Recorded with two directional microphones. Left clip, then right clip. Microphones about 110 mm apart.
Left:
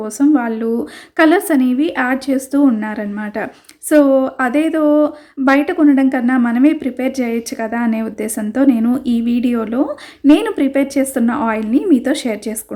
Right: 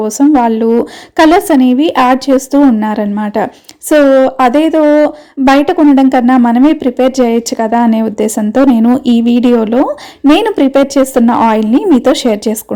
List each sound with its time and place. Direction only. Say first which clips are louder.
0.0 s a woman's voice: right 6 dB; 45° right (ahead or behind)